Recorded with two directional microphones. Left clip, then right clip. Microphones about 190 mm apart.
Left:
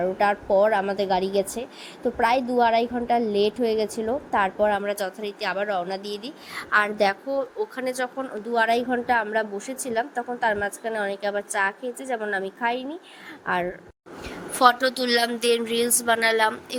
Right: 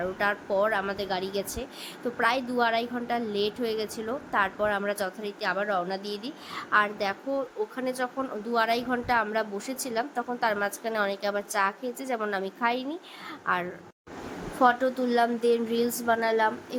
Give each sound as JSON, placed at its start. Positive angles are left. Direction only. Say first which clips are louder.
{"t": 0.0, "sound": "a woman's voice", "louder": "left 6 dB", "side_deg": 20}
{"t": 14.6, "sound": "a woman's voice", "louder": "left 4 dB", "side_deg": 50}